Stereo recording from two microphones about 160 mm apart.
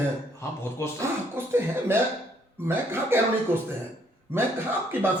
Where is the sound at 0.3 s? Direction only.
15° left (ahead or behind).